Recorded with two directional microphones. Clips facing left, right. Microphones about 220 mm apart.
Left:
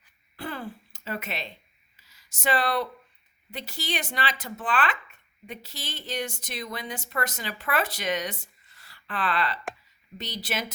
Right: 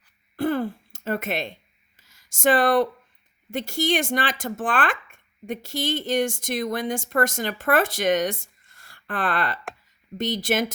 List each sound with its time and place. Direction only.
0.3 s speech: 50° right (ahead or behind)
2.0 s a sound: 50° right (ahead or behind)
3.5 s speech: 50° right (ahead or behind)